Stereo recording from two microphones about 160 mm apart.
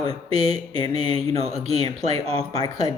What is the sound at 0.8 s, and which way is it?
Mantra, 30° left (ahead or behind).